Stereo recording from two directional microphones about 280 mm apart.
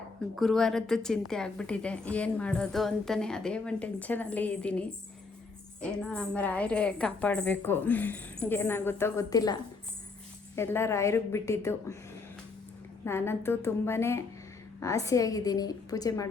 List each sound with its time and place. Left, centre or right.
0.3 s a woman's voice: centre
13.1 s a woman's voice: centre